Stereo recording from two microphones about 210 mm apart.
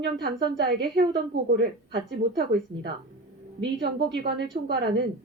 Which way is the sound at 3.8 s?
50° right (ahead or behind).